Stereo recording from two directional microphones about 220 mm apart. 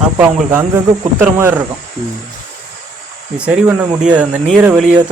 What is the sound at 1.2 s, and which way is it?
Speech, 10° right (ahead or behind).